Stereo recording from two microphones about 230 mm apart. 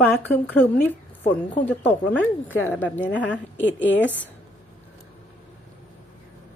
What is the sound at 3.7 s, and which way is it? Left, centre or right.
Speech, left.